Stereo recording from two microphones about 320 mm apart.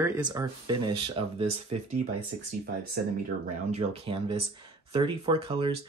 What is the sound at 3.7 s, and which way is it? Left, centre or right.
Speech, centre.